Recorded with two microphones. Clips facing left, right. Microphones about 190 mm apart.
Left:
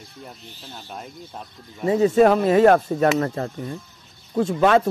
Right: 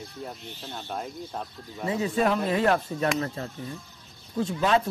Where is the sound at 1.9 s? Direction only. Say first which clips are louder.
Left 9 dB; 40° left (ahead or behind).